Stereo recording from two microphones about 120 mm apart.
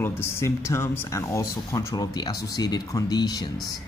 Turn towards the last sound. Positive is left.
turn(degrees=35)  # may be behind; listen again after turning